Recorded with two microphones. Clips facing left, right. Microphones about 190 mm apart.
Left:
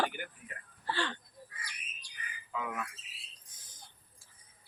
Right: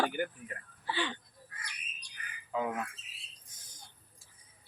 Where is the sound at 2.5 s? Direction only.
30° right (ahead or behind).